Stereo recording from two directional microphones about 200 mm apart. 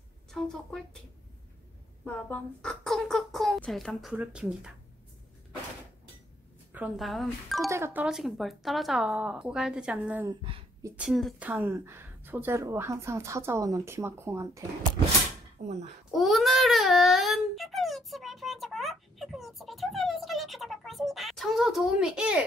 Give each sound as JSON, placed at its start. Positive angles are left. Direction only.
{"t": 0.3, "sound": "speech", "side_deg": 0}
{"t": 2.0, "sound": "speech", "side_deg": 5}
{"t": 6.7, "sound": "speech", "side_deg": -5}
{"t": 7.7, "sound": "a woman's voice", "side_deg": -10}
{"t": 15.6, "sound": "a child's voice", "side_deg": -40}
{"t": 16.1, "sound": "a sound", "side_deg": 0}